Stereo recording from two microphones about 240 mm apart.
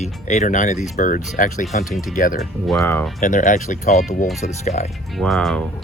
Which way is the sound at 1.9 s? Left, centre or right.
Centre.